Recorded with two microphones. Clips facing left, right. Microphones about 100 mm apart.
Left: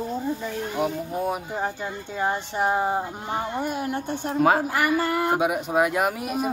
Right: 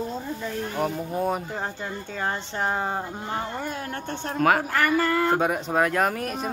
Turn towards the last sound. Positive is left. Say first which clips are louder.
# even
turn(degrees=10)  # may be behind; listen again after turning